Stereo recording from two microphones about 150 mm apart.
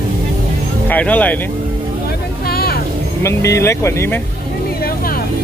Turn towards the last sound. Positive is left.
turn(degrees=15)  # may be behind; listen again after turning